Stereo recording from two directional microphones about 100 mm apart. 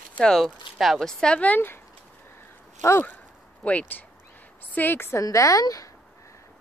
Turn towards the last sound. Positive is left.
turn(degrees=35)  # may be behind; listen again after turning